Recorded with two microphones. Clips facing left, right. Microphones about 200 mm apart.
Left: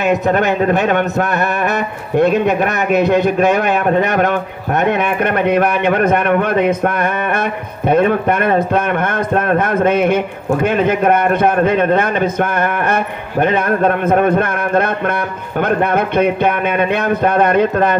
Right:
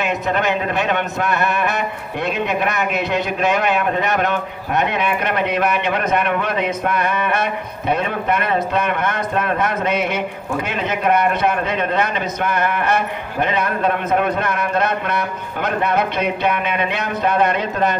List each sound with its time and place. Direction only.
0.0 s speech: 45° left (ahead or behind)